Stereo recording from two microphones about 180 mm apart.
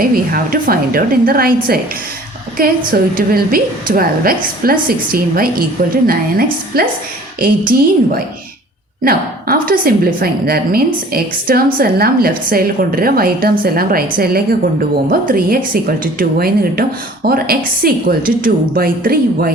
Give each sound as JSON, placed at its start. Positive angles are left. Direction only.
{"t": 0.0, "sound": "a woman's voice", "side_deg": -50}
{"t": 2.6, "sound": "a woman's voice", "side_deg": -55}